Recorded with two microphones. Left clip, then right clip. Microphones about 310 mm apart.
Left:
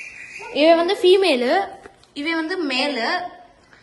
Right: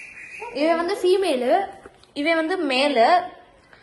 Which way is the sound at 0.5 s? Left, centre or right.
Centre.